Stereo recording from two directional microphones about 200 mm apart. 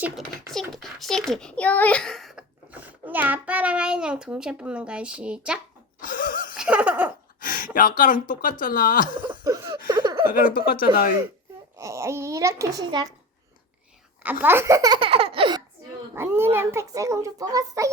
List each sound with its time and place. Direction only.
0.5 s a child's voice: centre (ahead or behind)
6.0 s a sound: 45° left (ahead or behind)
6.6 s laughter: 5° right (ahead or behind)
7.4 s speech: 45° left (ahead or behind)
9.2 s a sound: 20° right (ahead or behind)
10.3 s speech: 45° left (ahead or behind)
11.8 s a child's voice: 15° right (ahead or behind)
14.3 s a child's voice: 10° right (ahead or behind); by 15.3 s 25° right (ahead or behind)
15.4 s baby laughter: 25° right (ahead or behind)
16.1 s a child's voice: 10° right (ahead or behind)